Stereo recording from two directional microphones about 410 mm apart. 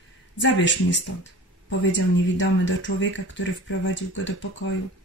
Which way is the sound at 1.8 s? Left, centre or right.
Left.